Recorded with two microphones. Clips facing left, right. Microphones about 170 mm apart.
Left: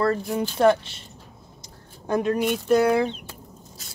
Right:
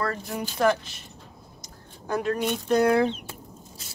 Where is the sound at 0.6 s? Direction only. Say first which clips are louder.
Left 4 dB; 30° left (ahead or behind).